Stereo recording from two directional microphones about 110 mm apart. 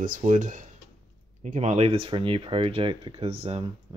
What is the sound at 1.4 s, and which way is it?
Speech, 90° right.